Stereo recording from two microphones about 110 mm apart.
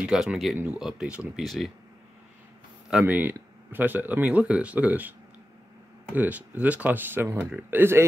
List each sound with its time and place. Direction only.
0.0 s speech: 5° right (ahead or behind)
2.9 s speech: 10° right (ahead or behind)
6.1 s speech: 15° right (ahead or behind)